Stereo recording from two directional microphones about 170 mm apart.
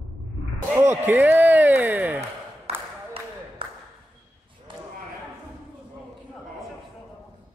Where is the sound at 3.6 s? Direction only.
30° right (ahead or behind).